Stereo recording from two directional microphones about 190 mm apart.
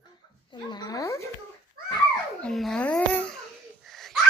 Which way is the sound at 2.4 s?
Centre (ahead or behind).